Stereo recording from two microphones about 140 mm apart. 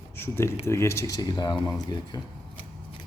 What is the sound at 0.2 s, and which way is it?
Speech, 20° left (ahead or behind).